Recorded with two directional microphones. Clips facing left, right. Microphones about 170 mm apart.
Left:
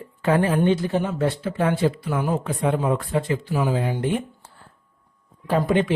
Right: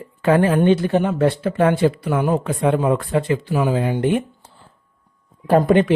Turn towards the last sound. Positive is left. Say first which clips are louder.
# right 6 dB
turn(degrees=-55)  # may be behind; listen again after turning